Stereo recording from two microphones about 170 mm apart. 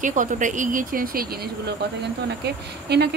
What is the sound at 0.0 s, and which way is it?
Speech, 50° right (ahead or behind).